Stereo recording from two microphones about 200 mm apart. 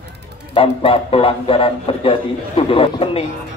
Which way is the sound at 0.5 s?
30° left (ahead or behind).